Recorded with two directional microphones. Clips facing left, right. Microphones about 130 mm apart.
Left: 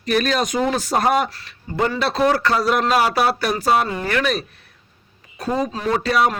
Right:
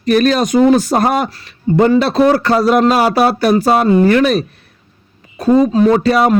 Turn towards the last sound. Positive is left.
turn(degrees=-35)  # may be behind; listen again after turning